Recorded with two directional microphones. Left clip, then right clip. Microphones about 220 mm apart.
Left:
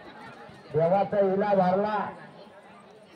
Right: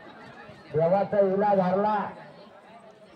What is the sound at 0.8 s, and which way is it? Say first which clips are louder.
A man's voice: right 1 dB; 30° left (ahead or behind).